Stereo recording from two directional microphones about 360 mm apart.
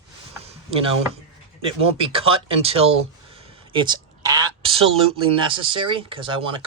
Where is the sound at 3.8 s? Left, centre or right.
Centre.